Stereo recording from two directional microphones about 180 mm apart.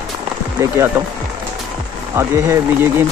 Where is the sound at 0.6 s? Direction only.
15° right (ahead or behind).